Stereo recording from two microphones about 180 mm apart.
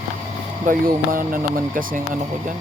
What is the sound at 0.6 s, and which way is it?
Speech, 50° right (ahead or behind).